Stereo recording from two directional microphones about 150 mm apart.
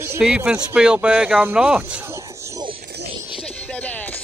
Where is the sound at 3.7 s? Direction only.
10° left (ahead or behind).